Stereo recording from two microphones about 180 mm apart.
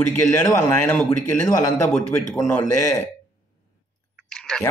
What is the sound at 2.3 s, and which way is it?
Speech, 20° left (ahead or behind).